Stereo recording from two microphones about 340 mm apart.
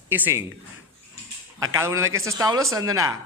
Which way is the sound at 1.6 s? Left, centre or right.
Centre.